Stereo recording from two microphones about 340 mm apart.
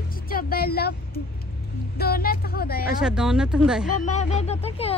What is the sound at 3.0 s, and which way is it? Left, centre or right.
Speech, centre.